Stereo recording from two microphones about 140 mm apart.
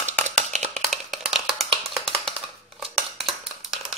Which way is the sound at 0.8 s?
Centre (ahead or behind).